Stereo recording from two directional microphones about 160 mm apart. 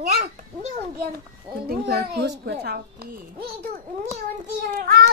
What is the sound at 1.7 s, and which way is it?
A child's voice, 85° right.